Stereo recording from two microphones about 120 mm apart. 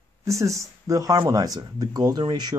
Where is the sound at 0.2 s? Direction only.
25° right (ahead or behind).